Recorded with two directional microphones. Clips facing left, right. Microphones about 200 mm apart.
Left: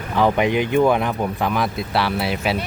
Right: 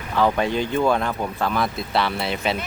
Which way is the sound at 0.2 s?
15° left (ahead or behind).